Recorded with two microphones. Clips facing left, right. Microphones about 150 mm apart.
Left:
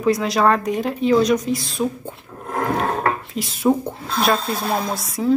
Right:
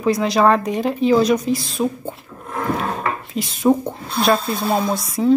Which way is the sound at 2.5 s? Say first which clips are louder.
Left 1 dB; 50° left (ahead or behind).